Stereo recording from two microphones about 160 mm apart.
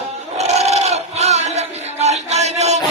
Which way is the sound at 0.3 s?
45° right (ahead or behind).